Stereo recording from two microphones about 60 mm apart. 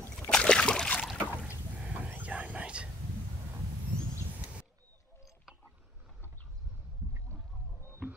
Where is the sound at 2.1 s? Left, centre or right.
Right.